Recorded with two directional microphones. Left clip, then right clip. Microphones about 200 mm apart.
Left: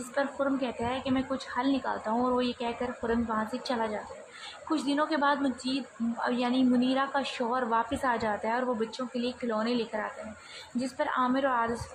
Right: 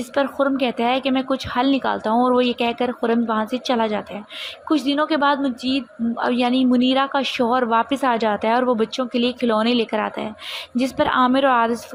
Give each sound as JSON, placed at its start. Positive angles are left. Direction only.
{"t": 0.1, "sound": "a woman's voice", "side_deg": -35}